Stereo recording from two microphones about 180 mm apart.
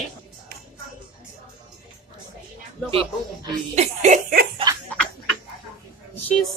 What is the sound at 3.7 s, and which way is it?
Speech, 40° right (ahead or behind).